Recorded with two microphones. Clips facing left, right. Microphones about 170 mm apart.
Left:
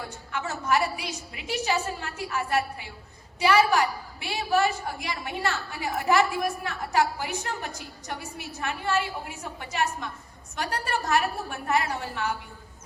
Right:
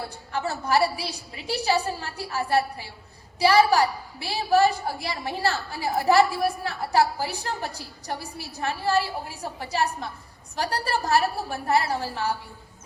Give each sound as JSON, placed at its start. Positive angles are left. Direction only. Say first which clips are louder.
{"t": 0.0, "sound": "a woman's voice", "louder": "right 4 dB", "side_deg": -35}